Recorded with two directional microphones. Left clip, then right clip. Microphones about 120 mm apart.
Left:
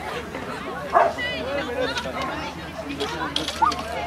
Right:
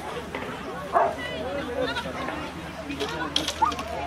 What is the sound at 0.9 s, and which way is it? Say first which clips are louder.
Bow-wow: left 4 dB; 50° left (ahead or behind).